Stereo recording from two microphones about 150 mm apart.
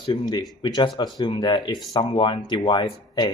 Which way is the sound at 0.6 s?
30° left (ahead or behind).